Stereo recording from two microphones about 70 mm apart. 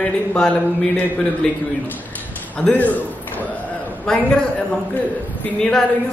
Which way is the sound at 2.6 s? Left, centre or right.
Centre.